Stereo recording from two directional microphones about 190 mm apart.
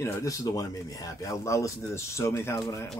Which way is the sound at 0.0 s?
15° left (ahead or behind).